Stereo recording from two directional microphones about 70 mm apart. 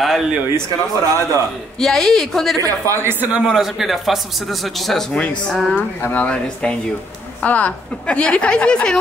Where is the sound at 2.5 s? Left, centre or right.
Right.